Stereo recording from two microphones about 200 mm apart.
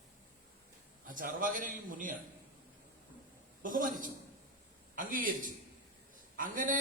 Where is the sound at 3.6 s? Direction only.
45° right (ahead or behind).